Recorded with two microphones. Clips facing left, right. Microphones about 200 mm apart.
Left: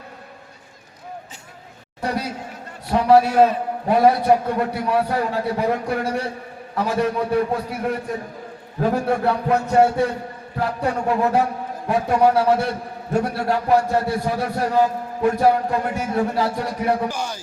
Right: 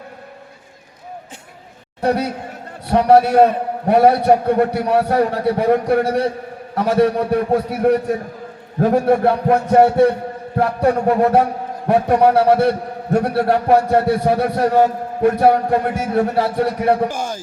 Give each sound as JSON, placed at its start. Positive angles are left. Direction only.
{"t": 2.0, "sound": "a man's voice", "side_deg": -60}